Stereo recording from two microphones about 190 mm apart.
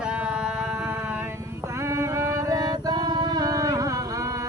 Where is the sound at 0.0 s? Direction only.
5° right (ahead or behind).